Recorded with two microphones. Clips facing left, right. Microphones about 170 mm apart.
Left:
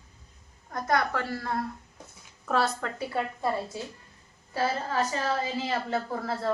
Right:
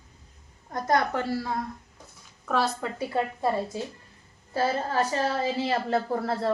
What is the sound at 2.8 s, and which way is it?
Speech, 20° right (ahead or behind).